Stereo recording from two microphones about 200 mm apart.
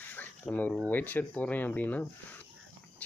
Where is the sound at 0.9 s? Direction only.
10° left (ahead or behind).